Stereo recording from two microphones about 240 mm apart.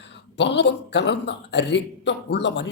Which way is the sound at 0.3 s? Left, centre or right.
Left.